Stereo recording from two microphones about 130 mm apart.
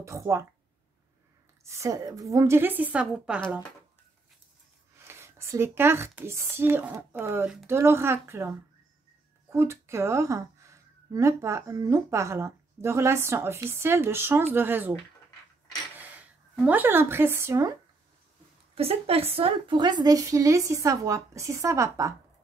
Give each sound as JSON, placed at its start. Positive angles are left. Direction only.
{"t": 0.0, "sound": "a woman's voice", "side_deg": -20}
{"t": 1.6, "sound": "a woman's voice", "side_deg": -20}
{"t": 4.9, "sound": "a woman's voice", "side_deg": -20}
{"t": 16.0, "sound": "speech", "side_deg": -10}
{"t": 18.8, "sound": "a woman's voice", "side_deg": -50}